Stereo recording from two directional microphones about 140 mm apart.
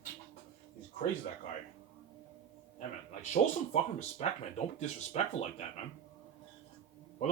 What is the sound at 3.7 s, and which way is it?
Speech, 55° left (ahead or behind).